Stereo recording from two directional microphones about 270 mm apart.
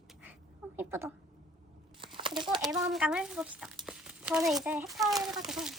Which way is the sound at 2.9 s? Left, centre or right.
Centre.